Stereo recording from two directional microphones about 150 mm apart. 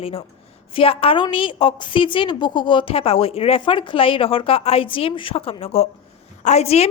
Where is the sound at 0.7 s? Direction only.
40° left (ahead or behind).